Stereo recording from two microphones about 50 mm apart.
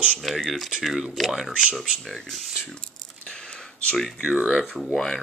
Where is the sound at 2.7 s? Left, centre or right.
Centre.